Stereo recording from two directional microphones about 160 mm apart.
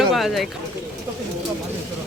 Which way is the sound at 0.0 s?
Centre (ahead or behind).